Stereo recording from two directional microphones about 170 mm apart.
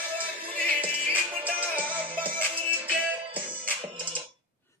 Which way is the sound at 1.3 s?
10° right (ahead or behind).